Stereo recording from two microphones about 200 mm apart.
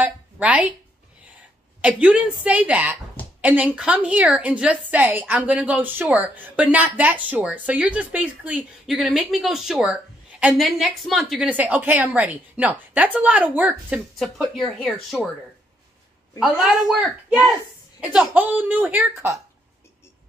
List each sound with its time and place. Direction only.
0.0 s a woman's voice: 5° right (ahead or behind)
1.8 s a woman's voice: 5° right (ahead or behind)
16.3 s a woman's voice: 5° right (ahead or behind)